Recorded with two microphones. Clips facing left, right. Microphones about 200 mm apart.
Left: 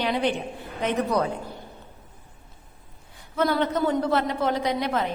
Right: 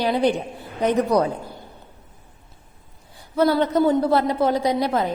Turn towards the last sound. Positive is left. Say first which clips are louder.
# right 4 dB
turn(degrees=-35)  # may be behind; listen again after turning